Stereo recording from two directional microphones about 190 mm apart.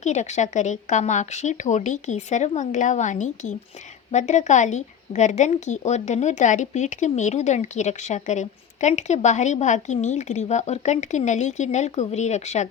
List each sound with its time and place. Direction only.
0.0 s a woman's voice: 40° left (ahead or behind)